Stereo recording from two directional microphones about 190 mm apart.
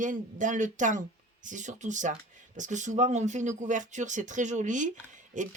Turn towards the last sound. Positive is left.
turn(degrees=-40)  # may be behind; listen again after turning